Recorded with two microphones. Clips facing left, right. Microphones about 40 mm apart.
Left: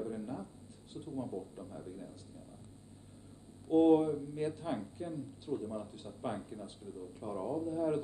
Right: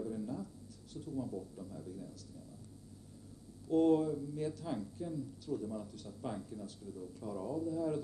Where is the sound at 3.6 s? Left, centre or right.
Left.